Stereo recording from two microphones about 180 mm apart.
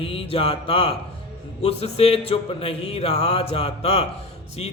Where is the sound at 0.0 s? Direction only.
30° left (ahead or behind).